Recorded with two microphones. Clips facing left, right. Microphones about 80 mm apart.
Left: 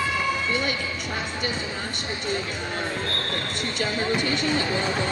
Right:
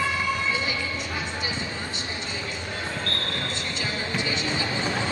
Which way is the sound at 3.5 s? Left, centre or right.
Left.